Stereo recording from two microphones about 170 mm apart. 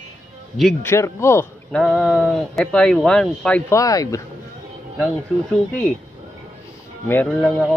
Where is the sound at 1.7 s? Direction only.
Centre (ahead or behind).